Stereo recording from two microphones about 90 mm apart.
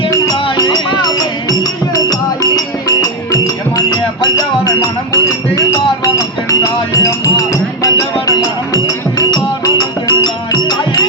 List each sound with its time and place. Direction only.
0.5 s music: 45° left (ahead or behind)